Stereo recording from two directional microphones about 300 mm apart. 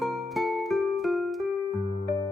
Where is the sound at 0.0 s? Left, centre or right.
Centre.